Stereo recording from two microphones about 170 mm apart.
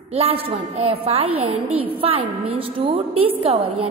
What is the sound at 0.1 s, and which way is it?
A woman's voice, 35° right (ahead or behind).